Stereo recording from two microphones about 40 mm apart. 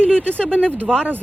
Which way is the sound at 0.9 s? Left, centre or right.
Centre.